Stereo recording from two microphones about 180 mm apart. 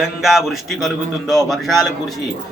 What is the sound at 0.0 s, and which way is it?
Speech, centre (ahead or behind).